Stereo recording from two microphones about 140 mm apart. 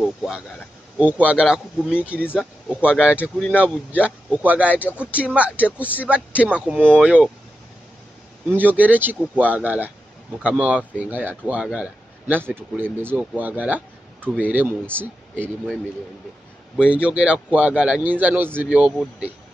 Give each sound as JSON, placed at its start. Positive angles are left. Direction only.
{"t": 0.0, "sound": "speech", "side_deg": -5}
{"t": 8.5, "sound": "speech", "side_deg": -10}
{"t": 15.4, "sound": "speech", "side_deg": 5}
{"t": 16.7, "sound": "speech", "side_deg": -5}